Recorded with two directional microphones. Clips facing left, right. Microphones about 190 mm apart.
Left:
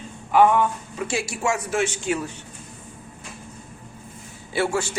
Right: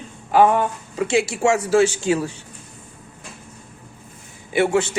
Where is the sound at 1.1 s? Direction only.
25° right (ahead or behind).